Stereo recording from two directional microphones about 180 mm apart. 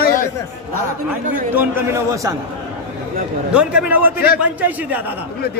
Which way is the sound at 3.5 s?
5° right (ahead or behind).